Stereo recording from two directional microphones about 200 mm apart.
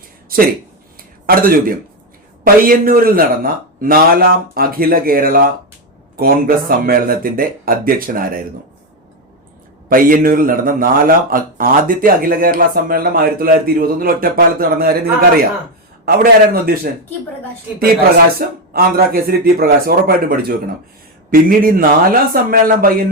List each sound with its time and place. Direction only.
0.3 s a man's voice: 45° right (ahead or behind)
9.9 s a man's voice: 45° right (ahead or behind)
16.0 s a man's voice: 50° right (ahead or behind)
18.3 s a man's voice: 50° right (ahead or behind)